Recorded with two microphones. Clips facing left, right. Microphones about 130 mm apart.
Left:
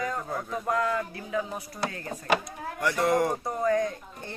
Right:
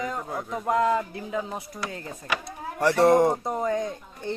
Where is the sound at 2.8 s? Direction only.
30° right (ahead or behind).